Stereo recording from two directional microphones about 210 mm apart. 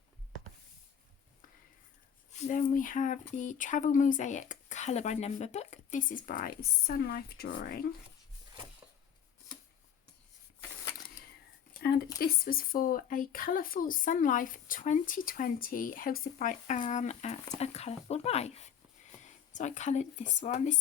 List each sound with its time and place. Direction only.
2.3 s speech: 35° left (ahead or behind)
11.8 s speech: 45° left (ahead or behind)